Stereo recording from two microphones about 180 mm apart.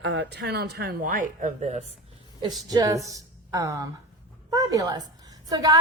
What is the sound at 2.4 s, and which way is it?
A woman's voice, 20° right (ahead or behind).